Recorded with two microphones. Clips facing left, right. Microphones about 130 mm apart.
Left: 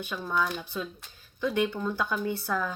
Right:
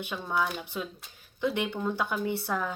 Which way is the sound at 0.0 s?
25° right (ahead or behind).